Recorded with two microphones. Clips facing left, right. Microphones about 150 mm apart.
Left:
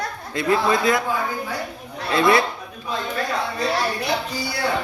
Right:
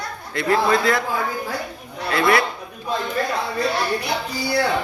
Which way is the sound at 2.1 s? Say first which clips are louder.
Left 1 dB; 25° left (ahead or behind).